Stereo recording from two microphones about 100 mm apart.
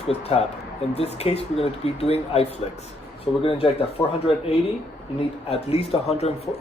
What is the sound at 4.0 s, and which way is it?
Speech, 55° left (ahead or behind).